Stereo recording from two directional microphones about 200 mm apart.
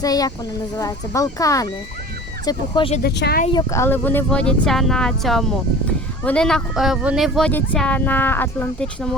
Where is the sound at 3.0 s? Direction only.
55° left (ahead or behind).